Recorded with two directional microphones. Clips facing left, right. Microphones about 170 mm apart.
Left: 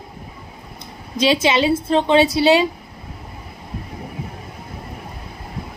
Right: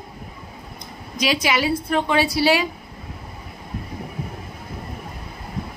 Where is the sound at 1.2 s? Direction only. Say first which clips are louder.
Left 5 dB; 25° left (ahead or behind).